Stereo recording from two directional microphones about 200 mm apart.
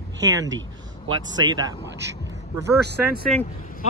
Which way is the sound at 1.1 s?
20° right (ahead or behind).